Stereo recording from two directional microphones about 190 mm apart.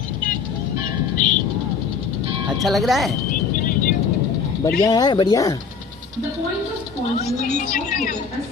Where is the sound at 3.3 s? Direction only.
45° left (ahead or behind).